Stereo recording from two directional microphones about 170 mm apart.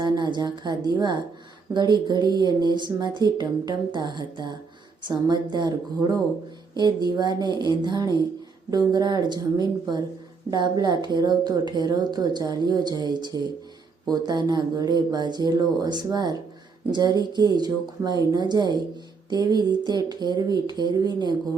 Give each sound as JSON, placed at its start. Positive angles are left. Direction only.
{"t": 0.0, "sound": "a woman's voice", "side_deg": -25}